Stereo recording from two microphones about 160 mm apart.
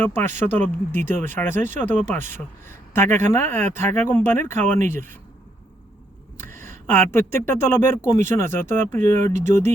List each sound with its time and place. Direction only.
0.0 s speech: 15° left (ahead or behind)
6.6 s speech: 15° left (ahead or behind)
9.2 s speech: 45° right (ahead or behind)